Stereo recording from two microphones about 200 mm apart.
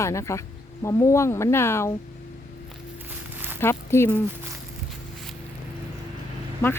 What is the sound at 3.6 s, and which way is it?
Speech, 10° left (ahead or behind).